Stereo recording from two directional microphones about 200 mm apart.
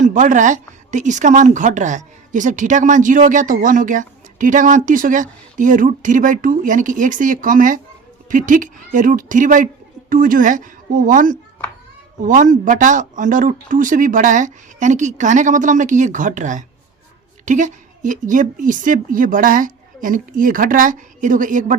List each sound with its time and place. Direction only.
0.0 s a woman's voice: 40° right (ahead or behind)